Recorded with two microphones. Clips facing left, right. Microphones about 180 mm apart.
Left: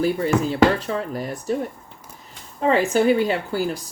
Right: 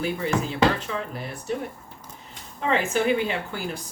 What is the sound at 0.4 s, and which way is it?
Speech, 40° left (ahead or behind).